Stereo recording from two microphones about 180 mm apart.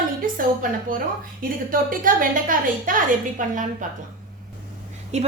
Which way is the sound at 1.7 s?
50° right (ahead or behind).